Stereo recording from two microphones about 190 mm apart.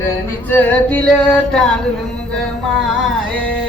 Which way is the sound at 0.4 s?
10° left (ahead or behind).